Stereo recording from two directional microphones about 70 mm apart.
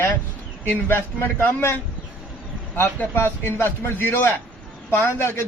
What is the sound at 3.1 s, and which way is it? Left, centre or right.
A man's voice, left.